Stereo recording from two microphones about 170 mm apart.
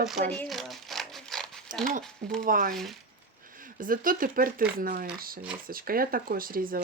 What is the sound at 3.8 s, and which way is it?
Speech, 55° right (ahead or behind).